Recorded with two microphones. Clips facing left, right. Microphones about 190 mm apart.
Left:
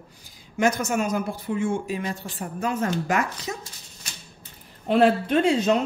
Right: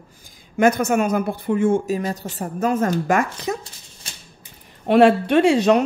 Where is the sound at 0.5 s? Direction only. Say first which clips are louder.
Right 6 dB; 55° right (ahead or behind).